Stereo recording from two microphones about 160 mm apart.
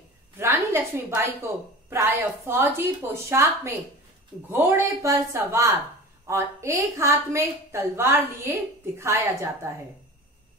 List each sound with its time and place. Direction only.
0.4 s a woman's voice: 15° right (ahead or behind)